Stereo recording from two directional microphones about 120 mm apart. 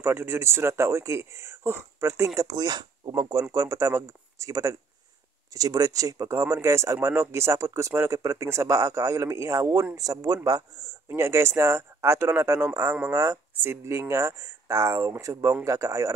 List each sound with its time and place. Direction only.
0.0 s speech: 20° right (ahead or behind)